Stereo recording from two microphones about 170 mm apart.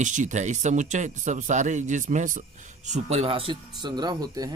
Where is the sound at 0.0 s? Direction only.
45° right (ahead or behind).